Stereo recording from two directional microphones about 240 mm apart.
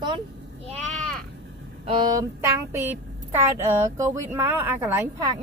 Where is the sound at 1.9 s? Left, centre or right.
Centre.